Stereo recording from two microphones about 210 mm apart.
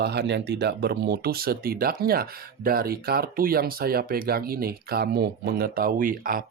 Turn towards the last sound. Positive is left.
turn(degrees=-40)  # may be behind; listen again after turning